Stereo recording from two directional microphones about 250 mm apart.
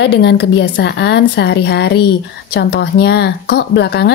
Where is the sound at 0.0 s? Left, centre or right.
Left.